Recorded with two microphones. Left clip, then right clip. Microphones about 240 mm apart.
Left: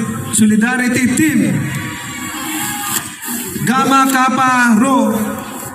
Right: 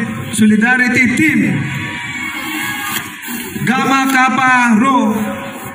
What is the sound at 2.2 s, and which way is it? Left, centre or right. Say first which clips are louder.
Music: right 1 dB; centre.